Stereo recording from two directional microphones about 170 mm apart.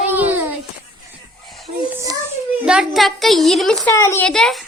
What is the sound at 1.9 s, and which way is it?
Children playing, 20° right (ahead or behind).